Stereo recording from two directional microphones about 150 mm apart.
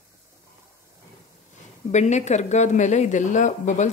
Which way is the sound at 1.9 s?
50° left (ahead or behind).